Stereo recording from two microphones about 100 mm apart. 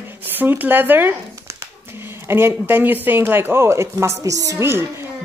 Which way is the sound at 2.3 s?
20° right (ahead or behind).